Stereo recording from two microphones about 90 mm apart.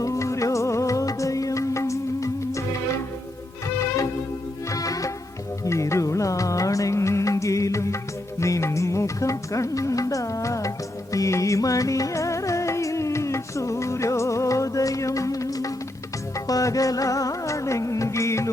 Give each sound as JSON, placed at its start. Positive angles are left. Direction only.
{"t": 0.0, "sound": "music", "side_deg": 35}